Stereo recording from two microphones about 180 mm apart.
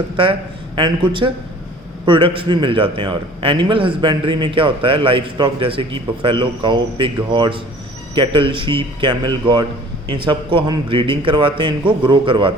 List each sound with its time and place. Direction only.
0.2 s a man's voice: 30° right (ahead or behind)